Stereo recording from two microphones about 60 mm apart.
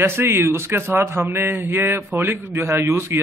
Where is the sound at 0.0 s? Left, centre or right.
Right.